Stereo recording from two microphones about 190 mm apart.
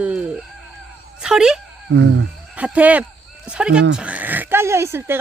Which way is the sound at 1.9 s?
75° right (ahead or behind).